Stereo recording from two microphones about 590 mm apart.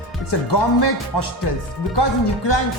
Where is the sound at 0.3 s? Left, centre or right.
Left.